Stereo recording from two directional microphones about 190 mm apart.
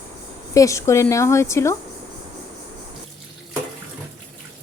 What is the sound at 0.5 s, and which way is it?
A woman's voice, 15° left (ahead or behind).